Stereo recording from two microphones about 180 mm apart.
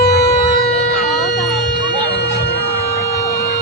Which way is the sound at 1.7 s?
70° left (ahead or behind).